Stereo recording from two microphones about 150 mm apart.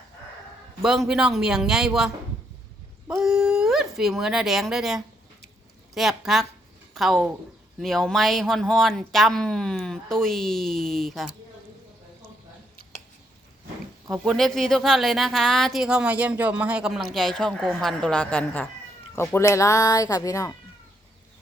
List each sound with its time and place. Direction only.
0.8 s speech: 5° right (ahead or behind)
14.1 s speech: centre (ahead or behind)
19.1 s speech: 15° left (ahead or behind)